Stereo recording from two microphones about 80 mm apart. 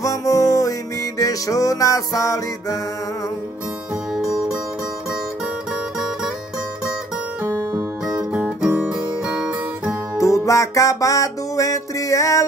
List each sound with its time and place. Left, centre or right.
0.0 s music: left
7.4 s music: right
8.2 s music: centre
10.1 s music: left